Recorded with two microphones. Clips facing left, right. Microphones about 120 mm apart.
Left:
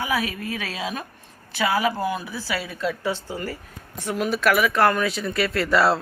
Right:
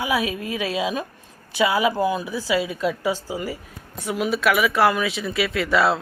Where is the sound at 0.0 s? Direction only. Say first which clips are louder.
Right 2 dB; 15° right (ahead or behind).